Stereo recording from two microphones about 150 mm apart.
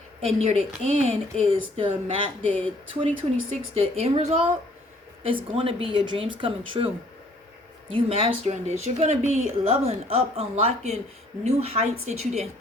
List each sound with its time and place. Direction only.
0.2 s speech: 45° right (ahead or behind)